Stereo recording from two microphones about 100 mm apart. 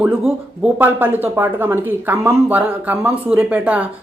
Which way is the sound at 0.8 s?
20° right (ahead or behind).